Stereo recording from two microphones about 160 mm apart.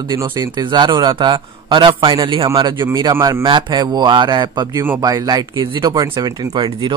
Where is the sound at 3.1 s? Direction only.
15° right (ahead or behind).